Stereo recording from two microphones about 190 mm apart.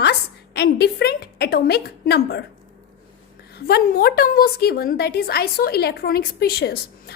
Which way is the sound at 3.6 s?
55° left (ahead or behind).